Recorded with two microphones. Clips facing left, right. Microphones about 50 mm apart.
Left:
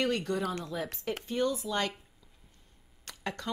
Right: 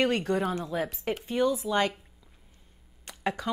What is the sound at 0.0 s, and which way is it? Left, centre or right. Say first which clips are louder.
Speech: right 4 dB; right.